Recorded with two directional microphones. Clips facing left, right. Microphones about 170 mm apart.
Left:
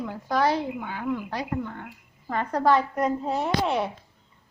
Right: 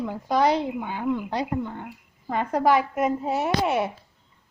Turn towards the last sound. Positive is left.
turn(degrees=-5)  # may be behind; listen again after turning